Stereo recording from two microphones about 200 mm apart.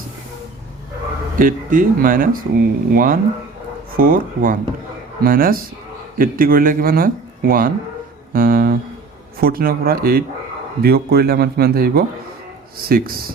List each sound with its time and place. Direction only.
1.4 s speech: 45° right (ahead or behind)